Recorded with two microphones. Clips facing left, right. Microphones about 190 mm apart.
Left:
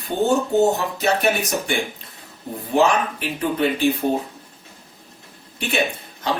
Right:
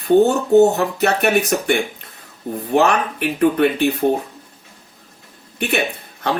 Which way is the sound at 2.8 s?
65° right (ahead or behind).